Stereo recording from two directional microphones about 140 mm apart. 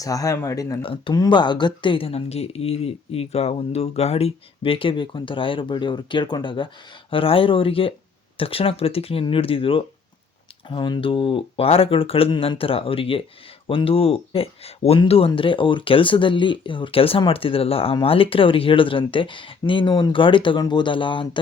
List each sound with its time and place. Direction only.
0.0 s speech: 25° left (ahead or behind)
0.8 s speech: 40° left (ahead or behind)